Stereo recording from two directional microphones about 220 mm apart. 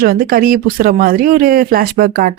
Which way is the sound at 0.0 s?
40° right (ahead or behind).